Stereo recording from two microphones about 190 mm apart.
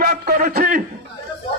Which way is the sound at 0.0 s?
45° right (ahead or behind).